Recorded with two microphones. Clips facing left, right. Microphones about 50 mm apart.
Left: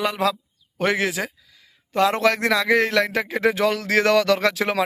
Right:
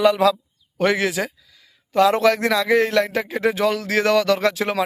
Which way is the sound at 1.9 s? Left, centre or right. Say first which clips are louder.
Right 3 dB; left.